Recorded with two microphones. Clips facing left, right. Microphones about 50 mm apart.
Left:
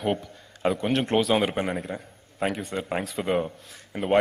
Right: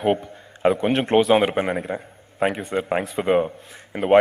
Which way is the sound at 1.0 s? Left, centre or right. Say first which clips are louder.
Right 7 dB; right.